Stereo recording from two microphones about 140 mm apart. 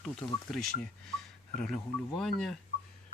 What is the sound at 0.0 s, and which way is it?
Speech, 5° left (ahead or behind).